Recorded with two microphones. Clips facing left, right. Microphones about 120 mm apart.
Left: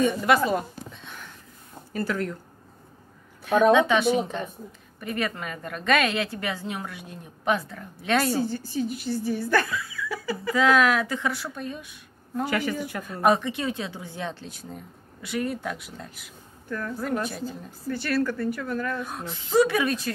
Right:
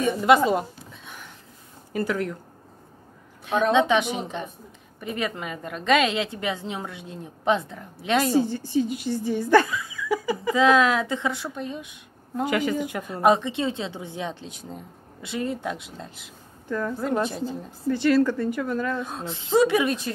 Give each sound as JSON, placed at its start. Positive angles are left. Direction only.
{"t": 0.1, "sound": "a woman's voice", "side_deg": -20}
{"t": 1.9, "sound": "speech", "side_deg": -15}
{"t": 3.7, "sound": "a woman's voice", "side_deg": -20}